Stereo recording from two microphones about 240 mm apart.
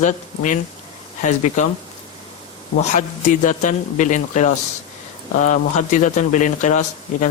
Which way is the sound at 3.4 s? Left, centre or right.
Left.